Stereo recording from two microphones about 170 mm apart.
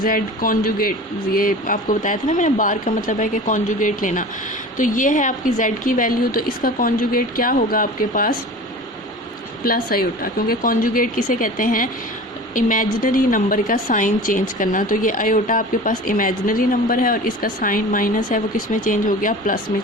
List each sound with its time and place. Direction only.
0.0 s a woman's voice: 55° left (ahead or behind)
9.6 s a woman's voice: 60° left (ahead or behind)